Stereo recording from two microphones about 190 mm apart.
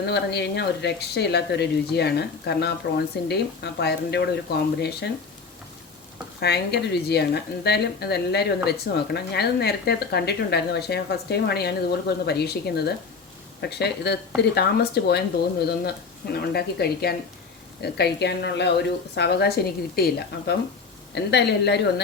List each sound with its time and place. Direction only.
0.0 s a woman's voice: 60° left (ahead or behind)
6.4 s a woman's voice: 60° left (ahead or behind)
16.3 s a woman's voice: 55° left (ahead or behind)